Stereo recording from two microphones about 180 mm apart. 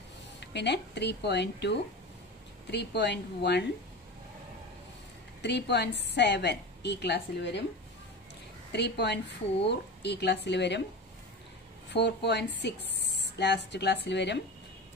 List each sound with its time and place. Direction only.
0.4 s a woman's voice: 70° left (ahead or behind)
5.4 s a woman's voice: 70° left (ahead or behind)
8.7 s a woman's voice: 70° left (ahead or behind)
11.9 s speech: 70° left (ahead or behind)